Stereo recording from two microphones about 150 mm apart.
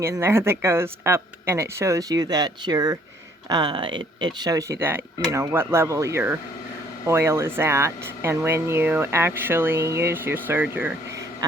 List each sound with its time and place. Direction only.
0.0 s a woman's voice: 20° right (ahead or behind)